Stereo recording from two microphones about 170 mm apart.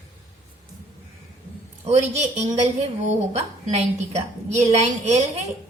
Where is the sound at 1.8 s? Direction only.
40° right (ahead or behind).